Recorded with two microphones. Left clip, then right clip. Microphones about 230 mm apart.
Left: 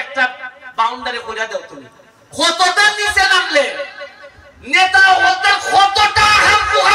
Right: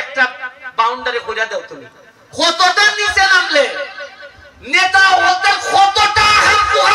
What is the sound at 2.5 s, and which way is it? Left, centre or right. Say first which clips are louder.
Speech: right 1 dB; centre.